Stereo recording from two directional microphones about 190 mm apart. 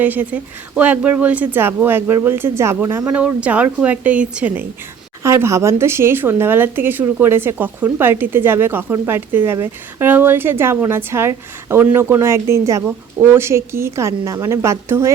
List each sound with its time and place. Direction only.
0.0 s a woman's voice: 10° right (ahead or behind)